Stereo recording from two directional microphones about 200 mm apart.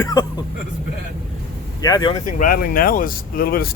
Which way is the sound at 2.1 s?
45° left (ahead or behind).